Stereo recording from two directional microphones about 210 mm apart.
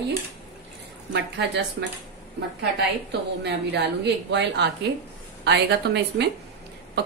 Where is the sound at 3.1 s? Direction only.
55° right (ahead or behind).